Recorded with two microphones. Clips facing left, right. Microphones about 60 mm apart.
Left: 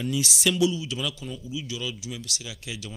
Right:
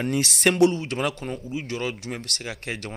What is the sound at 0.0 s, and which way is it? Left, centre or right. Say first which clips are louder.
A man's voice: right 4 dB; right.